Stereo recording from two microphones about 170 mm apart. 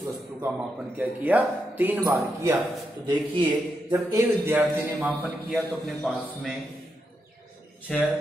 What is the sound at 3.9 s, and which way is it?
Speech, 15° right (ahead or behind).